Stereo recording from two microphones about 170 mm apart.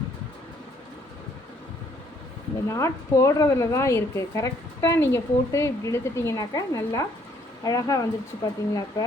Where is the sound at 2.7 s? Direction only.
15° left (ahead or behind).